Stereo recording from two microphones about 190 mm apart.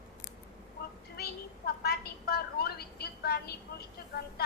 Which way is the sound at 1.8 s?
55° left (ahead or behind).